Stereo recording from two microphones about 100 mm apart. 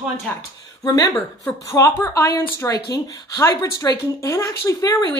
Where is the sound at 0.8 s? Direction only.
35° left (ahead or behind).